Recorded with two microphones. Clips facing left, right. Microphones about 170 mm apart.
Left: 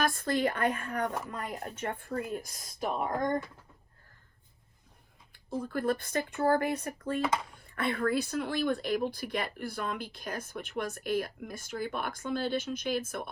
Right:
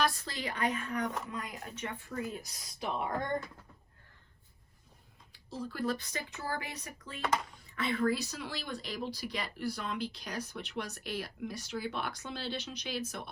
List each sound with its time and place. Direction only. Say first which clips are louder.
0.0 s speech: left 5 dB; 50° left (ahead or behind)
1.3 s speech: left 4 dB; 40° left (ahead or behind)
5.3 s speech: left 7 dB; 55° left (ahead or behind)